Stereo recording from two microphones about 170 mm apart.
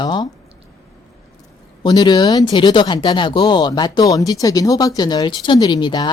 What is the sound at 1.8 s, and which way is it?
Speech, 25° left (ahead or behind).